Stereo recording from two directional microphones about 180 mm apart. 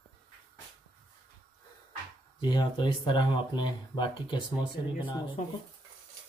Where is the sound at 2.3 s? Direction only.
25° left (ahead or behind).